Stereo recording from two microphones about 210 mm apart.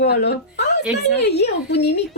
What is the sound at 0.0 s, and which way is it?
A woman's voice, 50° left (ahead or behind).